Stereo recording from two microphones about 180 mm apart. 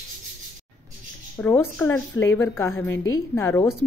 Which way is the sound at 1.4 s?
10° left (ahead or behind).